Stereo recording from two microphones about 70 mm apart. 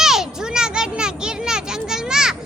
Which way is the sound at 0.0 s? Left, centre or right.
Centre.